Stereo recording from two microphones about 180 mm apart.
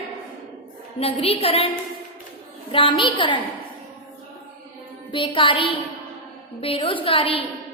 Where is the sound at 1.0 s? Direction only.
35° left (ahead or behind).